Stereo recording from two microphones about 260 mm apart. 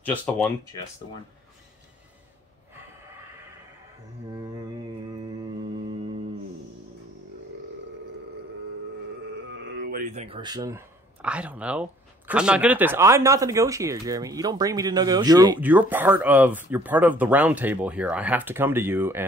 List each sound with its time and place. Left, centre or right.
0.0 s speech: centre
4.3 s mantra: centre
9.5 s speech: right; by 19.2 s centre